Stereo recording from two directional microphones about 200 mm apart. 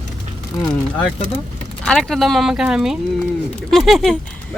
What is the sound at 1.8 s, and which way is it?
Speech, centre (ahead or behind).